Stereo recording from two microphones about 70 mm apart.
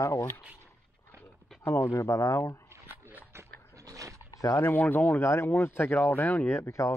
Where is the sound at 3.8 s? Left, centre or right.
Right.